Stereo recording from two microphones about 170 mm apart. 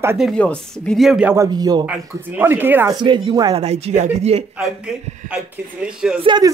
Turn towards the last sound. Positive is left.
turn(degrees=-30)  # may be behind; listen again after turning